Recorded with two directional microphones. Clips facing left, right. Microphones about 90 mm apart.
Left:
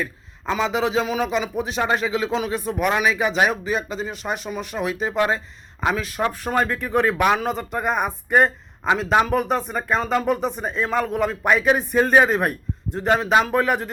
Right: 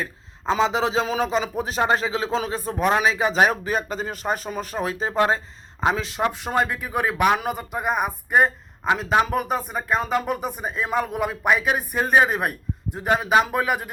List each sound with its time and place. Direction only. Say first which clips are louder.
0.0 s a man's voice: left 1 dB; 35° right (ahead or behind); by 13.9 s 5° right (ahead or behind)